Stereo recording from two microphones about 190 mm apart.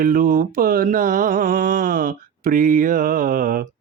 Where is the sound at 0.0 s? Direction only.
45° right (ahead or behind).